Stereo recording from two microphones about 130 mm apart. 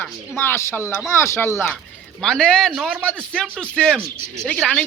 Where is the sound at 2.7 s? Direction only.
10° right (ahead or behind).